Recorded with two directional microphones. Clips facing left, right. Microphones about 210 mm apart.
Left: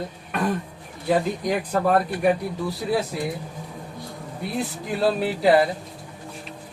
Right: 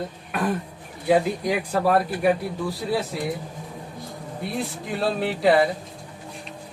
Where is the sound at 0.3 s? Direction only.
Centre (ahead or behind).